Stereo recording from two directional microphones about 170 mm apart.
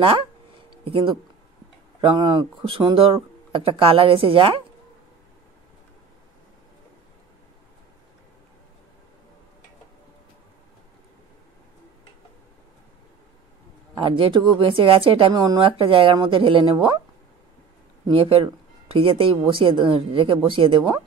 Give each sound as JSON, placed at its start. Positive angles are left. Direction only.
{"t": 0.8, "sound": "speech", "side_deg": -35}
{"t": 13.9, "sound": "speech", "side_deg": -30}
{"t": 18.0, "sound": "speech", "side_deg": -30}